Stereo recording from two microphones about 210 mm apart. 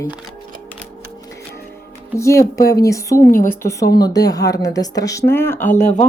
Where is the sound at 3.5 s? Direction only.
15° left (ahead or behind).